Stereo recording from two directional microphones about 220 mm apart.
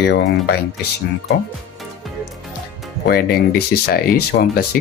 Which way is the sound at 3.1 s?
45° left (ahead or behind).